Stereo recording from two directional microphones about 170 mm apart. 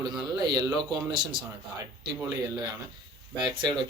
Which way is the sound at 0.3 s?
25° right (ahead or behind).